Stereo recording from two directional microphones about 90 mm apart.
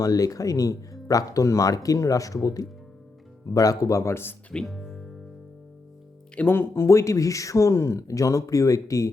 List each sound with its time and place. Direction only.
0.0 s speech: 40° left (ahead or behind)
4.5 s music: centre (ahead or behind)
6.3 s speech: 25° left (ahead or behind)